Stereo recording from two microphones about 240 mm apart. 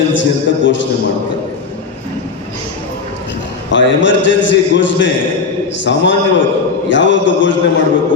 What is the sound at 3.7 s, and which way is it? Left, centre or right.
Mantra, left.